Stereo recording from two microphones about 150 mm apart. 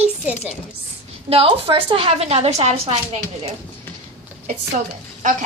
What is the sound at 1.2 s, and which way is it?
A woman's voice, 40° right (ahead or behind).